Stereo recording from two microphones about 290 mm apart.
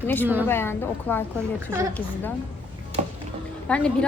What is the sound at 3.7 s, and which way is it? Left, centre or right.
Speech, centre.